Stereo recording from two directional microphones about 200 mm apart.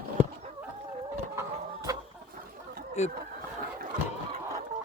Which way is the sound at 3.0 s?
35° left (ahead or behind).